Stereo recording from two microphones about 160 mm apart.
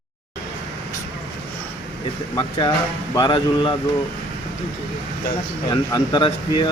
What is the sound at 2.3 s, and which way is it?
Speech, 30° left (ahead or behind).